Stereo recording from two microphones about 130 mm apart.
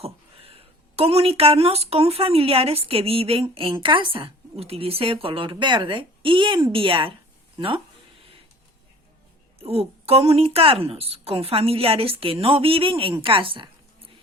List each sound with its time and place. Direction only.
0.0 s a woman's voice: 50° right (ahead or behind)
9.6 s a woman's voice: 50° right (ahead or behind)